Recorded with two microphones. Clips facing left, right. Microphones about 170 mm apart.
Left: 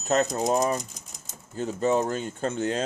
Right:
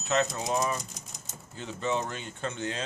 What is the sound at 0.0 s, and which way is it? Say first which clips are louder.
Speech: left 5 dB; 45° left (ahead or behind).